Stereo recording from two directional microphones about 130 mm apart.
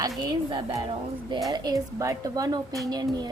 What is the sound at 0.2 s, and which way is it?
A woman's voice, 35° right (ahead or behind).